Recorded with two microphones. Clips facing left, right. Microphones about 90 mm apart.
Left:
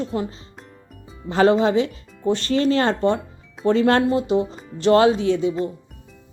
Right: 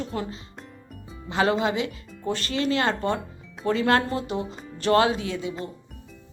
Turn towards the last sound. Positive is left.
turn(degrees=30)  # may be behind; listen again after turning